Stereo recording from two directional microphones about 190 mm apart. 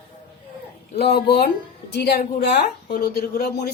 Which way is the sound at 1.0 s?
55° left (ahead or behind).